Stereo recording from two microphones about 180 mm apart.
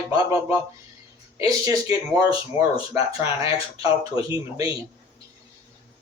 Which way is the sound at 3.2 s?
20° right (ahead or behind).